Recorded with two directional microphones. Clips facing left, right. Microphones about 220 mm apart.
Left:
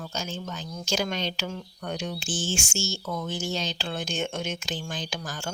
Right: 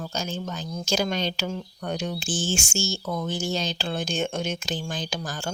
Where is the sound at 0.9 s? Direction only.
35° right (ahead or behind).